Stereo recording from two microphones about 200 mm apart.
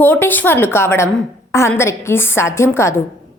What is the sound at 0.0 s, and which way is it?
A woman's voice, 10° left (ahead or behind).